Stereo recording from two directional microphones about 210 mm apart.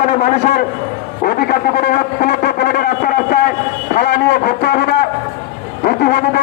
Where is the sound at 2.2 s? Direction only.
45° left (ahead or behind).